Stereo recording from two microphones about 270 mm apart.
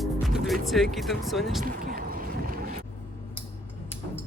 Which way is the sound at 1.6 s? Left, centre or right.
Right.